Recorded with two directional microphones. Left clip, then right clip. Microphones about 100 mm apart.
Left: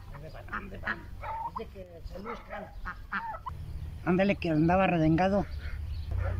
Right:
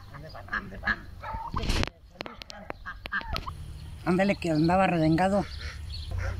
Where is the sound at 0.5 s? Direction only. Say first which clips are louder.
Right 6 dB; 15° left (ahead or behind).